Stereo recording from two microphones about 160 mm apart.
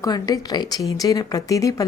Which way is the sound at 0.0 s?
25° left (ahead or behind).